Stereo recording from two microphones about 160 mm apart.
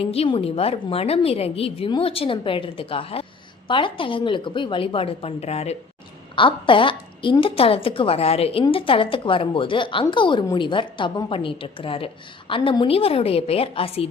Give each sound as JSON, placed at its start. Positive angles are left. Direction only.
{"t": 0.0, "sound": "a woman's voice", "side_deg": 40}
{"t": 6.3, "sound": "a woman's voice", "side_deg": 30}